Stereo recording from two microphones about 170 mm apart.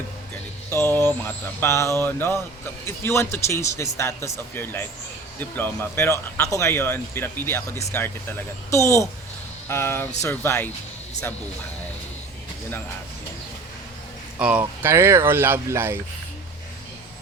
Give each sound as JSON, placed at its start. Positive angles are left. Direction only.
{"t": 0.9, "sound": "speech", "side_deg": 10}
{"t": 14.3, "sound": "speech", "side_deg": -10}